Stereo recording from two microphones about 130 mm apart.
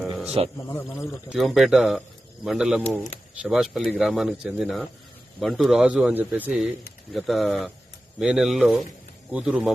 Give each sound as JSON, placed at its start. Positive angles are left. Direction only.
{"t": 0.4, "sound": "a man's voice", "side_deg": -50}
{"t": 1.0, "sound": "a man's voice", "side_deg": 0}